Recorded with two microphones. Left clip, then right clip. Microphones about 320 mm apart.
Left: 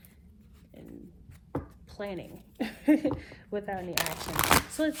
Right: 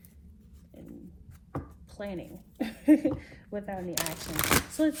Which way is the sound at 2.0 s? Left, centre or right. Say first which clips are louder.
Left 1 dB; left.